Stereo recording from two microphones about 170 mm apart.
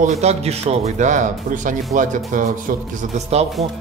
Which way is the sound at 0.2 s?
40° right (ahead or behind).